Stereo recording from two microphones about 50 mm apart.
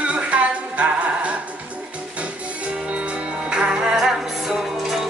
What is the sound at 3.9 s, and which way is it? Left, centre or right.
Music, centre.